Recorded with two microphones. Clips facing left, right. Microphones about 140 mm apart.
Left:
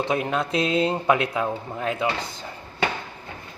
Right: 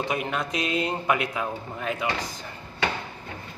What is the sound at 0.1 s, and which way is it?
A man's voice, 25° left (ahead or behind).